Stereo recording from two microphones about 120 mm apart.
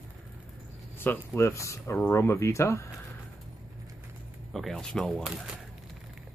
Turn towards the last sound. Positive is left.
turn(degrees=-5)  # may be behind; listen again after turning